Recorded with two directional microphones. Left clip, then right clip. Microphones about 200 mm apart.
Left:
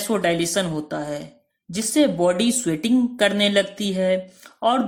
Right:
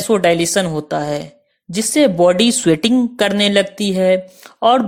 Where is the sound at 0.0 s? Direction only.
35° right (ahead or behind).